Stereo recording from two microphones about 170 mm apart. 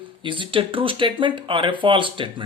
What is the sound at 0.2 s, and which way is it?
Speech, 30° right (ahead or behind).